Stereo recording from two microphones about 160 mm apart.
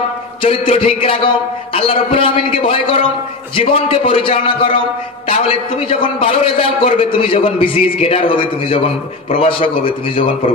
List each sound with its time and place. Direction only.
0.4 s a man's voice: 35° left (ahead or behind)
5.8 s a man's voice: 35° left (ahead or behind)